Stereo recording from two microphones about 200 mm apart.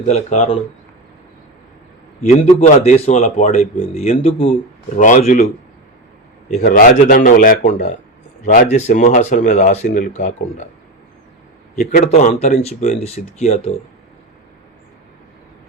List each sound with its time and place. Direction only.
0.1 s speech: 35° left (ahead or behind)
2.2 s speech: 35° left (ahead or behind)
4.9 s speech: 40° left (ahead or behind)
6.7 s speech: 45° left (ahead or behind)
11.8 s speech: 40° left (ahead or behind)